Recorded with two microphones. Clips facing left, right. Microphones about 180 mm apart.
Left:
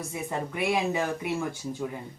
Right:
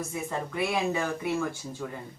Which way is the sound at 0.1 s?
15° left (ahead or behind).